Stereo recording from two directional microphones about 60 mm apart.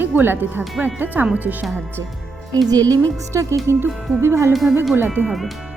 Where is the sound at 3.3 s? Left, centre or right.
Right.